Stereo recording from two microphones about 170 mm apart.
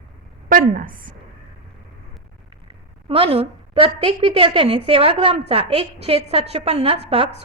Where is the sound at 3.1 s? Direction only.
35° right (ahead or behind).